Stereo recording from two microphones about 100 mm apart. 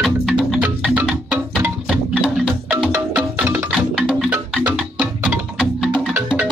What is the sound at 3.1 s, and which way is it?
Music, 20° right (ahead or behind).